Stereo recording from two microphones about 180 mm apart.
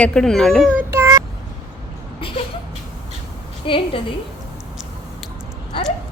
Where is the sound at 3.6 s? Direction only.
30° left (ahead or behind).